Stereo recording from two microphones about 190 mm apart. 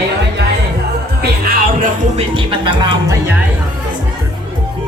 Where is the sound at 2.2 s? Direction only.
25° right (ahead or behind).